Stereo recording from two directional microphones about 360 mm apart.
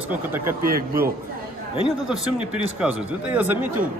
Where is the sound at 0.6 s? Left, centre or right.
Right.